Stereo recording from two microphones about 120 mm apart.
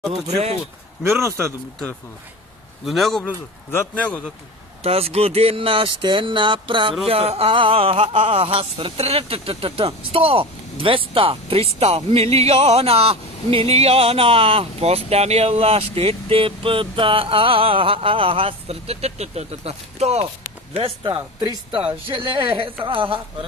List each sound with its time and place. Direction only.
0.1 s speech: 60° right (ahead or behind)
1.0 s a man's voice: 20° right (ahead or behind)
2.8 s speech: centre (ahead or behind)
3.3 s speech: 15° left (ahead or behind)
4.8 s speech: 55° right (ahead or behind)
7.1 s speech: 55° right (ahead or behind)
8.3 s speech: 60° right (ahead or behind)
20.7 s speech: 50° right (ahead or behind)